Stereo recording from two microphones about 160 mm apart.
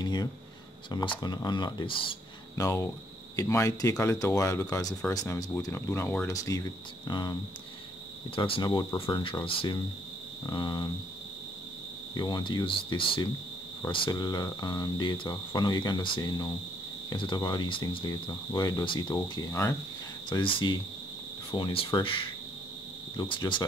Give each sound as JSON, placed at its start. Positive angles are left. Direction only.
{"t": 0.0, "sound": "speech", "side_deg": 25}
{"t": 2.5, "sound": "speech", "side_deg": 20}
{"t": 8.4, "sound": "speech", "side_deg": 30}
{"t": 12.1, "sound": "speech", "side_deg": 25}
{"t": 20.2, "sound": "speech", "side_deg": 30}